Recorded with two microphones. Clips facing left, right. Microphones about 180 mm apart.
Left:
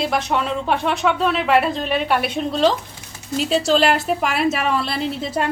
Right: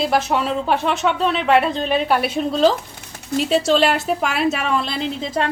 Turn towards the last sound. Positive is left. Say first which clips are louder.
# even
turn(degrees=5)  # may be behind; listen again after turning